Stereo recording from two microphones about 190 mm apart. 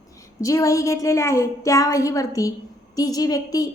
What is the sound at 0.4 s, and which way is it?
A woman's voice, 15° left (ahead or behind).